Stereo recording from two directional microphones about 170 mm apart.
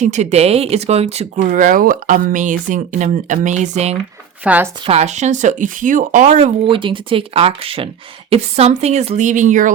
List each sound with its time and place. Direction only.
0.0 s speech: 40° right (ahead or behind)
4.4 s speech: 10° right (ahead or behind)
4.9 s speech: 40° right (ahead or behind)
6.7 s speech: 30° right (ahead or behind); by 9.7 s 50° right (ahead or behind)